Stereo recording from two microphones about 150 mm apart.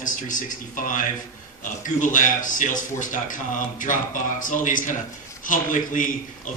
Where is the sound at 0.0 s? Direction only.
60° left (ahead or behind).